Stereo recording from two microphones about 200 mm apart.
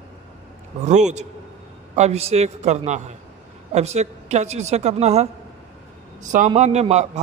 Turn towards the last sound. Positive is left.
turn(degrees=-35)  # may be behind; listen again after turning